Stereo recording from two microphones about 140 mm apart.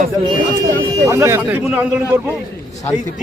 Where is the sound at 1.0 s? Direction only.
20° right (ahead or behind).